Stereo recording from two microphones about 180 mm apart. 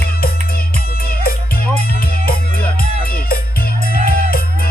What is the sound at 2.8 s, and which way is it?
Music, 55° left (ahead or behind).